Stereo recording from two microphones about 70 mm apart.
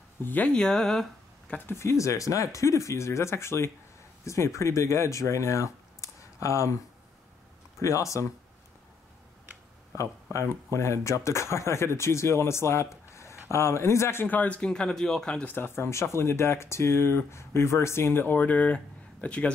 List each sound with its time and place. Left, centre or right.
0.2 s speech: left
0.5 s speech: centre
1.7 s speech: left
7.8 s speech: left
10.3 s speech: left; by 15.4 s centre
15.4 s speech: left
18.2 s speech: left